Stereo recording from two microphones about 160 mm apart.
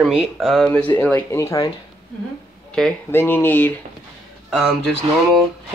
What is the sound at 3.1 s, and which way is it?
Speech, 15° left (ahead or behind).